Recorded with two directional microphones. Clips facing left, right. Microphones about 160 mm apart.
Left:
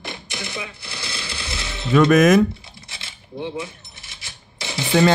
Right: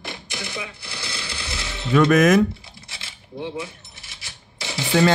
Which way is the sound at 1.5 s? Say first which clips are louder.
Left 1 dB; 25° left (ahead or behind).